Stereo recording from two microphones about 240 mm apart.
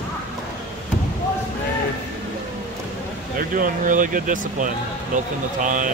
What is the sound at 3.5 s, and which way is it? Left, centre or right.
Speech, right.